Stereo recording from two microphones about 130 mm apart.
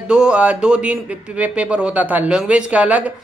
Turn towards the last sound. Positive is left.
turn(degrees=-10)  # may be behind; listen again after turning